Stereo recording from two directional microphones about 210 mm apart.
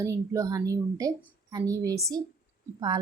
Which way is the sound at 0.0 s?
15° right (ahead or behind).